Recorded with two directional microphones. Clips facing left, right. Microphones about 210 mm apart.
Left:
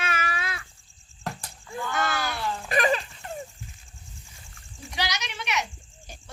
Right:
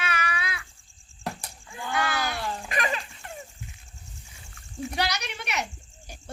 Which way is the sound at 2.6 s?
40° left (ahead or behind).